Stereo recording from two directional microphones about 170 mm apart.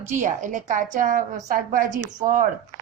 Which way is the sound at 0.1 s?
45° right (ahead or behind).